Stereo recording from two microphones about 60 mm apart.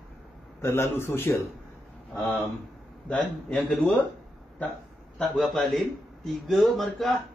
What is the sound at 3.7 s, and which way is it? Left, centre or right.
Speech, left.